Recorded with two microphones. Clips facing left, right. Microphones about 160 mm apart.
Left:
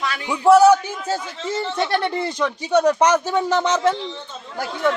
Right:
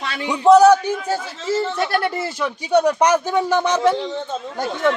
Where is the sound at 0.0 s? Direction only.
25° right (ahead or behind).